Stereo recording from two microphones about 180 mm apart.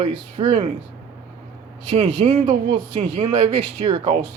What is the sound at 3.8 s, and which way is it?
Speech, 35° right (ahead or behind).